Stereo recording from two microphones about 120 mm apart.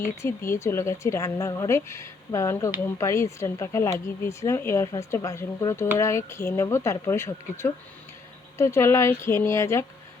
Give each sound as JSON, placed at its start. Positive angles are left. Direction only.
{"t": 0.2, "sound": "speech", "side_deg": 20}